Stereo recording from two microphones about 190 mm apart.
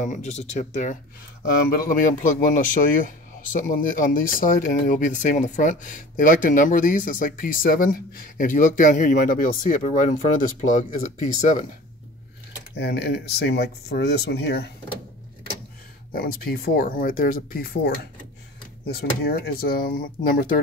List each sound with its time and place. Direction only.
0.0 s speech: 40° left (ahead or behind)
12.7 s speech: 60° left (ahead or behind)
16.1 s speech: 50° left (ahead or behind)